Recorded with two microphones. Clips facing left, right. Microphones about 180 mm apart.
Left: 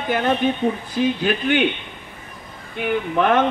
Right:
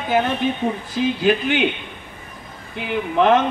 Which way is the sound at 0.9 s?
55° left (ahead or behind).